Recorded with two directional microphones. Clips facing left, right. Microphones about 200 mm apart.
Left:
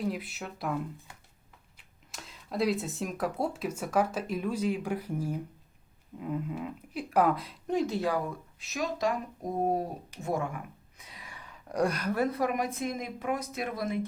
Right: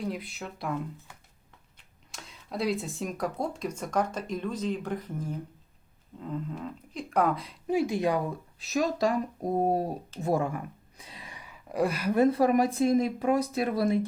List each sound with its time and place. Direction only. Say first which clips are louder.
0.0 s speech: left 1 dB; centre (ahead or behind)
2.1 s speech: left 2 dB; centre (ahead or behind); by 8.2 s 15° right (ahead or behind)
8.5 s speech: right 7 dB; 35° right (ahead or behind)
10.1 s speech: right 7 dB; 15° left (ahead or behind)
10.9 s a sound: right 3 dB; 25° right (ahead or behind)
11.3 s a sound: right 1 dB; 5° right (ahead or behind)
12.1 s speech: right 7 dB; 25° right (ahead or behind)